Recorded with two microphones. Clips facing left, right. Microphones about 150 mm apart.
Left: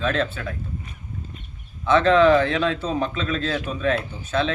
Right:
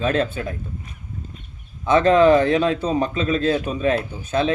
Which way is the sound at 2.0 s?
45° right (ahead or behind).